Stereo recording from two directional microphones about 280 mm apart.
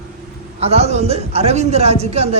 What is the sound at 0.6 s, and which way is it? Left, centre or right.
A woman's voice, right.